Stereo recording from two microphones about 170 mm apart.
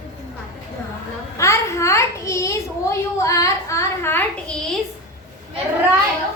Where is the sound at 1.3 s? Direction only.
15° left (ahead or behind).